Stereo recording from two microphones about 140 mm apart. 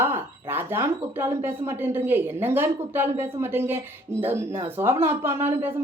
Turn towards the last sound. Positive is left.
turn(degrees=-15)  # may be behind; listen again after turning